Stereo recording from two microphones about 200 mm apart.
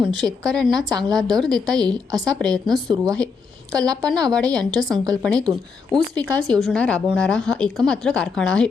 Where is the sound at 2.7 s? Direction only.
20° right (ahead or behind).